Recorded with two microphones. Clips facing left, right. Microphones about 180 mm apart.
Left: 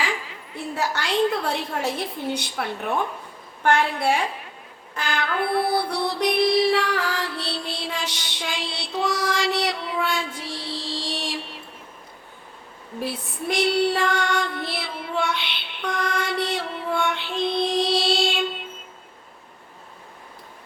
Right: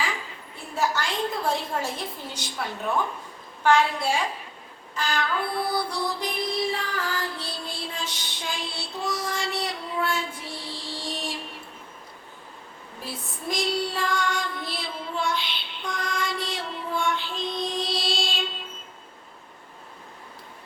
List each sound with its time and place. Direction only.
0.5 s a sound: 70° left (ahead or behind)
2.3 s a woman's voice: 65° left (ahead or behind)
4.9 s music: 60° left (ahead or behind); by 11.3 s 80° left
13.0 s female singing: 70° left (ahead or behind)